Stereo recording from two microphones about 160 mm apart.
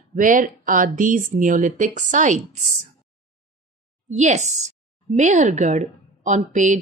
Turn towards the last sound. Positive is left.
turn(degrees=-50)  # may be behind; listen again after turning